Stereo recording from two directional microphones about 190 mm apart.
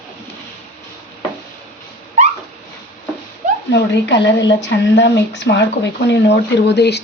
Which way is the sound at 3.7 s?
65° left (ahead or behind).